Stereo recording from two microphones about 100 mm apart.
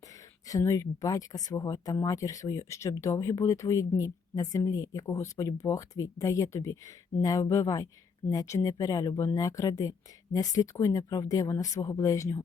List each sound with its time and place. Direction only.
0.4 s speech: 35° left (ahead or behind)